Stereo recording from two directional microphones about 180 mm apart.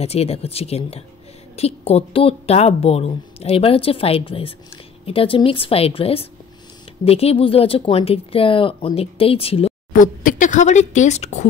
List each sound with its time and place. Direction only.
0.0 s speech: 35° left (ahead or behind)
9.9 s speech: 45° left (ahead or behind)